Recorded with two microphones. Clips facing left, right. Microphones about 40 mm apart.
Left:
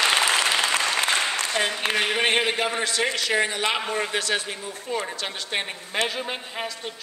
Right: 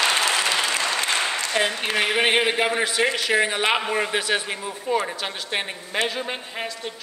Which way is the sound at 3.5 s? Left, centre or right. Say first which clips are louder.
Right 3 dB; right.